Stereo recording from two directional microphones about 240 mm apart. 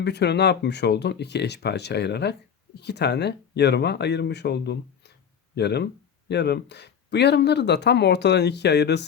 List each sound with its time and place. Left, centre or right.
0.0 s speech: left